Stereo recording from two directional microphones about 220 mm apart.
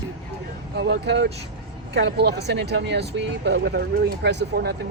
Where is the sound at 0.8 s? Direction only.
50° right (ahead or behind).